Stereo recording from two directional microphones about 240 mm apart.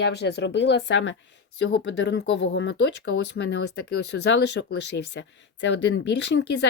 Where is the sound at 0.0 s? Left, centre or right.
Left.